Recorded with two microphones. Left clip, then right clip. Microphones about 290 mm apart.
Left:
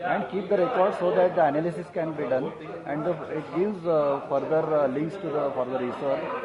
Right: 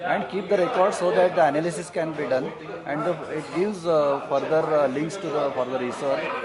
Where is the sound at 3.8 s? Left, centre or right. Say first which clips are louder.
Right 3 dB; centre.